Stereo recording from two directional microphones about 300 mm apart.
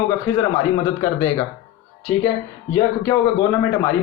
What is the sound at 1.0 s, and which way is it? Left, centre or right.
Speech, centre.